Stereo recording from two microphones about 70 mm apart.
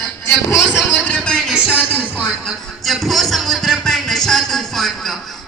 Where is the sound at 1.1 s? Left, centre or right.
Centre.